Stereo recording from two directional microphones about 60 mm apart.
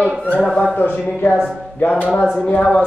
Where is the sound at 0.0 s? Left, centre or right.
Left.